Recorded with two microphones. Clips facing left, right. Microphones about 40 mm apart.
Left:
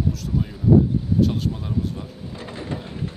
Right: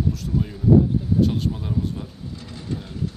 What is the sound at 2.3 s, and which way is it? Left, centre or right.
Mechanisms, left.